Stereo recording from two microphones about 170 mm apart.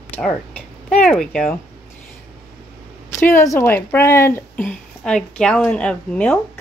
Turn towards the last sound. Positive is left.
turn(degrees=5)  # may be behind; listen again after turning